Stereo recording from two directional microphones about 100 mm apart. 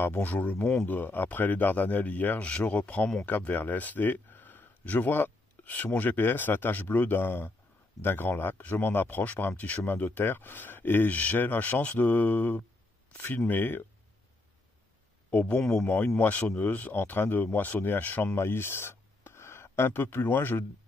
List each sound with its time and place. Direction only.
0.0 s speech: 20° left (ahead or behind)
15.3 s speech: 15° left (ahead or behind)